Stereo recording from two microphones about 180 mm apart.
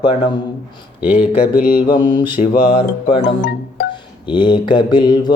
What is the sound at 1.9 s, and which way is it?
Speech, 25° left (ahead or behind).